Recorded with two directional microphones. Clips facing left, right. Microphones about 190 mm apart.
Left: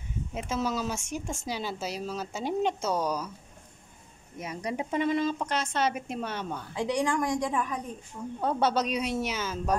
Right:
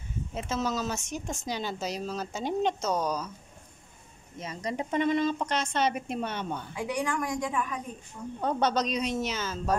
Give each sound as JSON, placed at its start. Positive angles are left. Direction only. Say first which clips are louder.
{"t": 0.3, "sound": "speech", "louder": "even", "side_deg": 10}
{"t": 4.4, "sound": "a woman's voice", "louder": "even", "side_deg": 10}
{"t": 6.7, "sound": "a woman's voice", "louder": "left 5 dB", "side_deg": 30}
{"t": 8.4, "sound": "speech", "louder": "even", "side_deg": 5}